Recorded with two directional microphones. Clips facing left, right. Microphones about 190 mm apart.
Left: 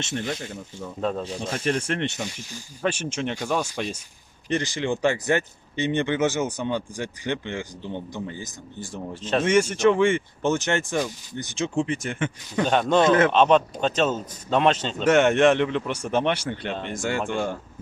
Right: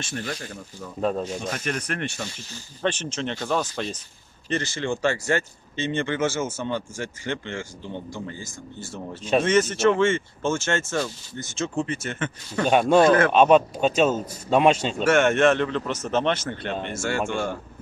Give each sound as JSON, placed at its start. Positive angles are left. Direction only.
{"t": 0.0, "sound": "speech", "side_deg": 20}
{"t": 12.6, "sound": "a man's voice", "side_deg": -10}
{"t": 13.0, "sound": "speech", "side_deg": 20}
{"t": 13.3, "sound": "a man's voice", "side_deg": -10}
{"t": 15.0, "sound": "speech", "side_deg": 20}